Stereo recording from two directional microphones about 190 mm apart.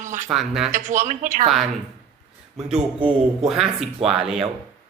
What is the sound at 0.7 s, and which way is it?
Speech, 40° right (ahead or behind).